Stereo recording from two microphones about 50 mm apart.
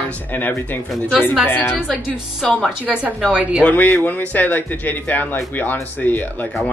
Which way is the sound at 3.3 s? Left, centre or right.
Right.